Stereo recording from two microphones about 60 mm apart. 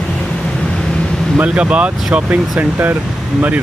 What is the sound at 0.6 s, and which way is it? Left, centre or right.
Vehicle, centre.